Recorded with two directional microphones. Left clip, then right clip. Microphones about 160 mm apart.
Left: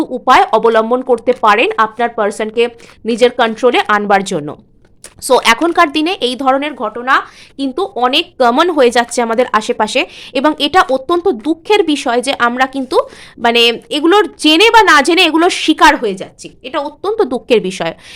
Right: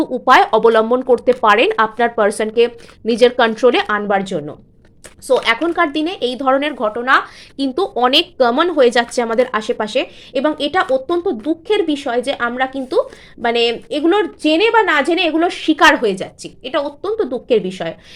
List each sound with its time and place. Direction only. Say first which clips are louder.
0.0 s a woman's voice: left 2 dB; 10° left (ahead or behind)
6.5 s speech: right 1 dB; 5° left (ahead or behind)
8.4 s a woman's voice: left 6 dB; 20° left (ahead or behind); by 15.7 s 40° left (ahead or behind)
15.7 s speech: even; 15° left (ahead or behind)
17.0 s a woman's voice: left 5 dB; 30° left (ahead or behind)